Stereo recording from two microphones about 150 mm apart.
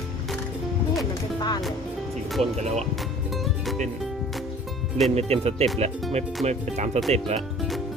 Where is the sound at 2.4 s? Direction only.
45° right (ahead or behind).